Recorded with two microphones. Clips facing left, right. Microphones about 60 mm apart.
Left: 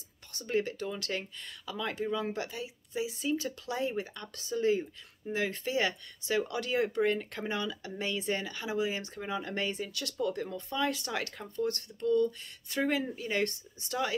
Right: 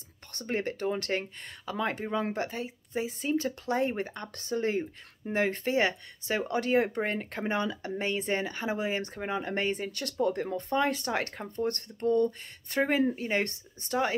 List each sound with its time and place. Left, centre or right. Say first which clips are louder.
0.3 s speech: even; right